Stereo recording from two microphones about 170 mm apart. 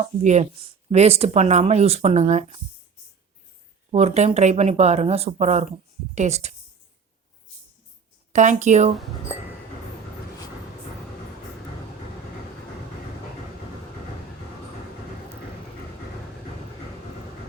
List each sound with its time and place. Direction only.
0.0 s speech: 40° right (ahead or behind)
3.9 s speech: 40° right (ahead or behind)
8.3 s speech: 45° right (ahead or behind)